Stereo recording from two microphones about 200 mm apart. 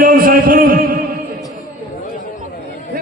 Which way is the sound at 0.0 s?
45° right (ahead or behind).